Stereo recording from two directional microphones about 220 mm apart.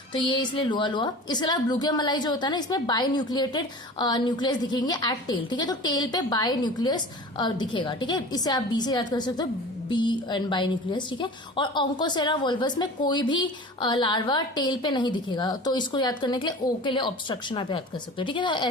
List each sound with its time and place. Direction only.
0.1 s a woman's voice: 20° left (ahead or behind)